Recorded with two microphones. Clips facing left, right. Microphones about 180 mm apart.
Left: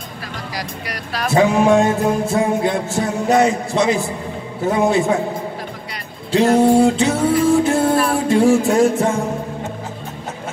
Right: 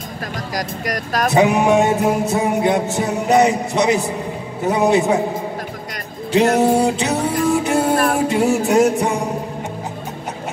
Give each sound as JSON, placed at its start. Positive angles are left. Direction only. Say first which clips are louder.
{"t": 0.6, "sound": "speech", "louder": "right 7 dB", "side_deg": -45}
{"t": 1.3, "sound": "music", "louder": "left 1 dB", "side_deg": -20}
{"t": 6.6, "sound": "music", "louder": "left 3 dB", "side_deg": -20}